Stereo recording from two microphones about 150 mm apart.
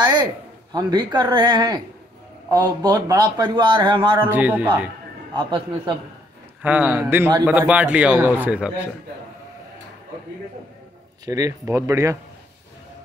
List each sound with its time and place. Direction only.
0.0 s a sound: 30° right (ahead or behind)
0.7 s speech: 30° right (ahead or behind)
2.8 s speech: 20° right (ahead or behind)
4.3 s a man's voice: 10° right (ahead or behind)
5.3 s a man's voice: 35° right (ahead or behind)
6.6 s a man's voice: 10° right (ahead or behind)
11.2 s speech: 20° right (ahead or behind)